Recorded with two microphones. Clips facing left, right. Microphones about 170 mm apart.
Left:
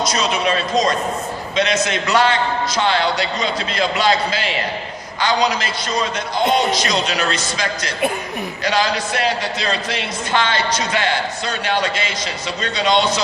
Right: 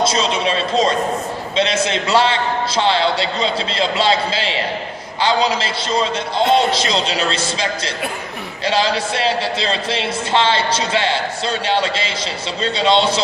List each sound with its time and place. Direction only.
0.0 s a man's voice: 25° right (ahead or behind)